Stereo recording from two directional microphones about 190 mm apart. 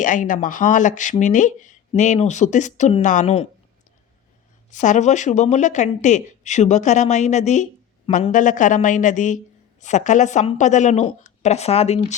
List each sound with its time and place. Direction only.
0.0 s speech: 45° left (ahead or behind)
4.7 s speech: 40° left (ahead or behind)